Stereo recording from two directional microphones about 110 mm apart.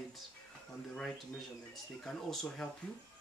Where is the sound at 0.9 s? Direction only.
5° left (ahead or behind).